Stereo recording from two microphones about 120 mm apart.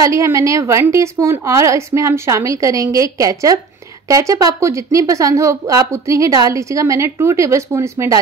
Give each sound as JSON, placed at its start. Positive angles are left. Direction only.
{"t": 0.0, "sound": "a woman's voice", "side_deg": -25}